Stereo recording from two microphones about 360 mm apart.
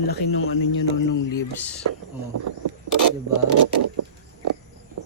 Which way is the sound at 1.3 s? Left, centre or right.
Centre.